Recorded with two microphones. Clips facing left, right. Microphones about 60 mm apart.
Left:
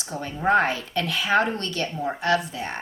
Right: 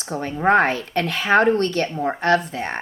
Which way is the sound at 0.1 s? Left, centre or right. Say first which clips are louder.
Right 4 dB; right.